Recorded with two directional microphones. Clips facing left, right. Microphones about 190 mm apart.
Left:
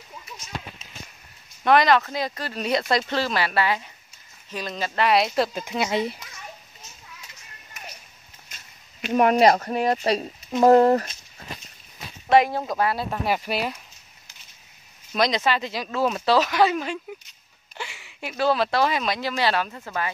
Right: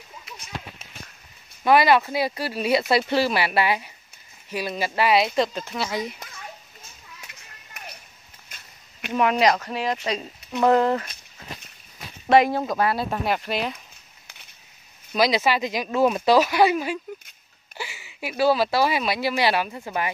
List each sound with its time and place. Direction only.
1.6 s speech: 5° right (ahead or behind); by 5.8 s 10° left (ahead or behind)
5.8 s speech: 25° left (ahead or behind)
7.8 s a sound: 60° right (ahead or behind)
9.1 s speech: 45° left (ahead or behind)
9.4 s speech: 30° left (ahead or behind)
9.7 s speech: 40° left (ahead or behind)
12.5 s speech: 15° left (ahead or behind)
12.9 s speech: 5° left (ahead or behind)
15.1 s speech: 5° right (ahead or behind)